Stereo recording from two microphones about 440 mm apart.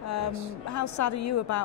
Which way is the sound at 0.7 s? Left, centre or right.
Left.